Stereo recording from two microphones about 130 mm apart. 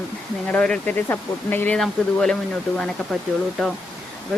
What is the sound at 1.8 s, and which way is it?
Speech, 5° left (ahead or behind).